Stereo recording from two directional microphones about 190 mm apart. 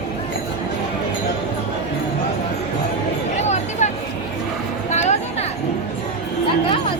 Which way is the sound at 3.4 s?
35° left (ahead or behind).